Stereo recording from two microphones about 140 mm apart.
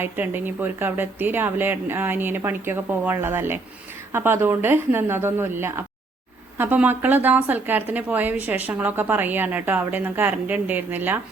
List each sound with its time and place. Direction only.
0.0 s a woman's voice: 15° right (ahead or behind)